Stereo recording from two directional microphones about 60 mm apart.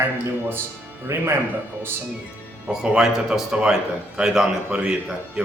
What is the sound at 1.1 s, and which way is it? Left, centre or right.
Speech, right.